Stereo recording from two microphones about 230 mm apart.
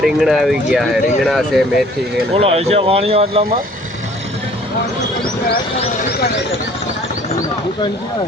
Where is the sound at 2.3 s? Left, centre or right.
Right.